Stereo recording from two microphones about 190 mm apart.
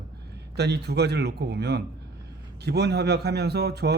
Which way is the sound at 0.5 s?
60° right (ahead or behind).